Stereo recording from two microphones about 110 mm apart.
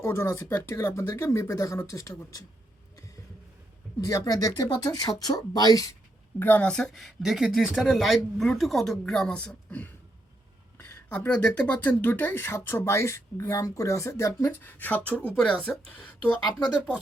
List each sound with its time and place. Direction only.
0.0 s speech: 25° left (ahead or behind)
4.0 s speech: 30° left (ahead or behind)
6.4 s speech: 15° left (ahead or behind)